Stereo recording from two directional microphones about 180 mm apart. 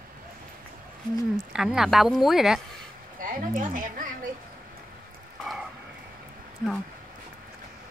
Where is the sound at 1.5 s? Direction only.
5° right (ahead or behind).